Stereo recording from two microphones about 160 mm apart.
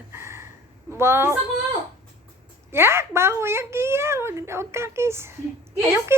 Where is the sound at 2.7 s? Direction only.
15° right (ahead or behind).